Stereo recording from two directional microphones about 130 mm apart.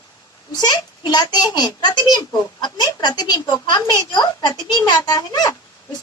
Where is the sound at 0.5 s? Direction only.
30° left (ahead or behind).